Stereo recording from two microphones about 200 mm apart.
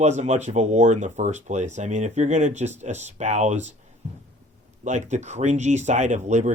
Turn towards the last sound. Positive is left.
turn(degrees=-35)  # may be behind; listen again after turning